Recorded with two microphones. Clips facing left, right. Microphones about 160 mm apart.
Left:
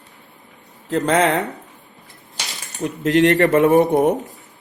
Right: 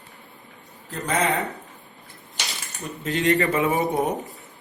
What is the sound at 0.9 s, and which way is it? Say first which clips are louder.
Speech: left 7 dB; 90° left.